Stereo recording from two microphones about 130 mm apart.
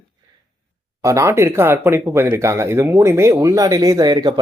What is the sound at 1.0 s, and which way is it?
Speech, 25° right (ahead or behind).